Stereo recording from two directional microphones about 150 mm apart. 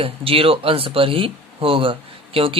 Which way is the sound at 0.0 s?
40° right (ahead or behind).